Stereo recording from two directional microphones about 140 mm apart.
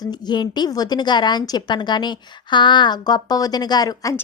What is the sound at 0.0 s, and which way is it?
A woman's voice, 30° left (ahead or behind).